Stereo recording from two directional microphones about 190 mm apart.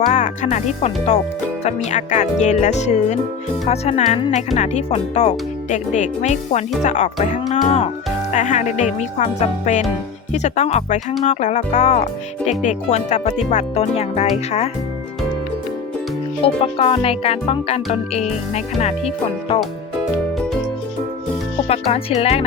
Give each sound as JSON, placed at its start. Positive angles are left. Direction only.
{"t": 0.0, "sound": "speech", "side_deg": 40}
{"t": 16.4, "sound": "music", "side_deg": 30}
{"t": 17.9, "sound": "speech", "side_deg": 35}
{"t": 21.7, "sound": "speech", "side_deg": 30}